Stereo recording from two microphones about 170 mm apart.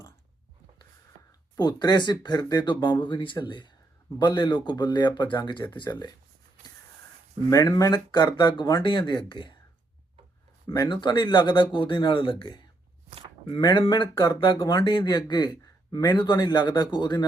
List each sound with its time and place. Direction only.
1.5 s speech: 25° left (ahead or behind)
7.5 s speech: 20° left (ahead or behind)
10.7 s speech: 25° left (ahead or behind)